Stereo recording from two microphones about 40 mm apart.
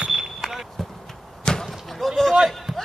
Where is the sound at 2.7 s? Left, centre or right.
Centre.